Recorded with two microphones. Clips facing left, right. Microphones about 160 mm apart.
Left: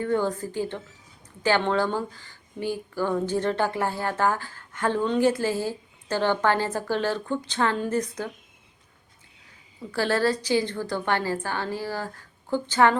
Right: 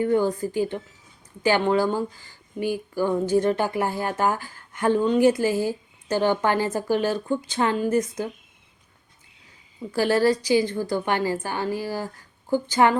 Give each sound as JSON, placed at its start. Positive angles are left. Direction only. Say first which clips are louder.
{"t": 0.0, "sound": "speech", "louder": "right 4 dB", "side_deg": -15}
{"t": 9.9, "sound": "speech", "louder": "right 4 dB", "side_deg": -15}